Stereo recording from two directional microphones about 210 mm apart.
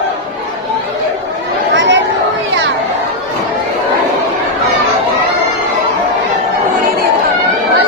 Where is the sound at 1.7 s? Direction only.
60° right (ahead or behind).